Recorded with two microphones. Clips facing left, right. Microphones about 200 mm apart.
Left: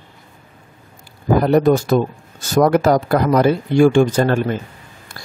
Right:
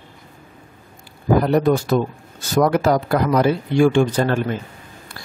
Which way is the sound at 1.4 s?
45° left (ahead or behind).